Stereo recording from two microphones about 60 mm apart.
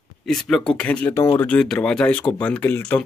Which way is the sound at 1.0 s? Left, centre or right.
Left.